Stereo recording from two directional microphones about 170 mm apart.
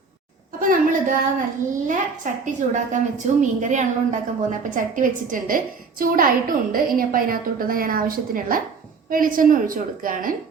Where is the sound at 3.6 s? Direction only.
45° right (ahead or behind).